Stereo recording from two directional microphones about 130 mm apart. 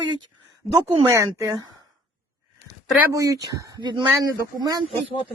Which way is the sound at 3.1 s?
25° right (ahead or behind).